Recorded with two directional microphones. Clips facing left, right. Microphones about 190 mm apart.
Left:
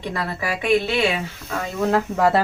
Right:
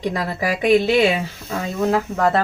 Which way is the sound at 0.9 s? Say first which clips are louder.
Right 5 dB; 20° right (ahead or behind).